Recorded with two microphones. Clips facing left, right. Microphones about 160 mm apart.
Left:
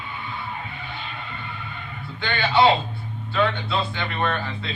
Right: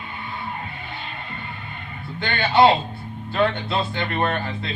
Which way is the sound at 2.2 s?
50° right (ahead or behind).